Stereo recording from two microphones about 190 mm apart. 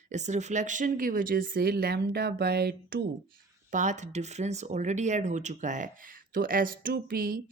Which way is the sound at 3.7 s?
40° right (ahead or behind).